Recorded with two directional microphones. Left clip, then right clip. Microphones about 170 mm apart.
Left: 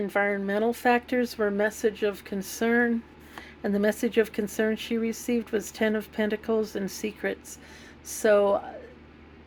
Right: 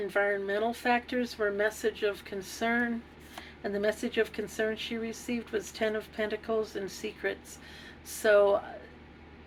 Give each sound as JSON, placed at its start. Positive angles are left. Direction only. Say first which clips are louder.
{"t": 0.1, "sound": "speech", "louder": "left 2 dB", "side_deg": 55}